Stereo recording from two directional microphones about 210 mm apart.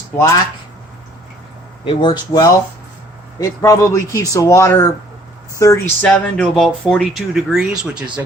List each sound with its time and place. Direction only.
1.8 s speech: 25° left (ahead or behind); by 8.2 s 5° right (ahead or behind)